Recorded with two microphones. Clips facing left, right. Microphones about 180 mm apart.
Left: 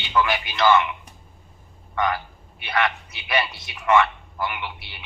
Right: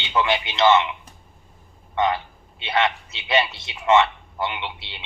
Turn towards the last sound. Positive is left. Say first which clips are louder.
# right 1 dB
turn(degrees=-25)  # may be behind; listen again after turning